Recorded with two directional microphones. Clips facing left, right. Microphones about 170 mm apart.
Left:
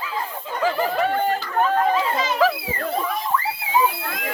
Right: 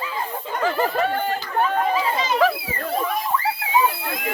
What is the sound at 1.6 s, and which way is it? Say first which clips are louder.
Speech: left 2 dB; centre (ahead or behind).